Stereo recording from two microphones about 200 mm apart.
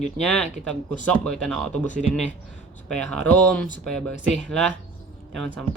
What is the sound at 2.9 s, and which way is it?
Speech, 5° left (ahead or behind).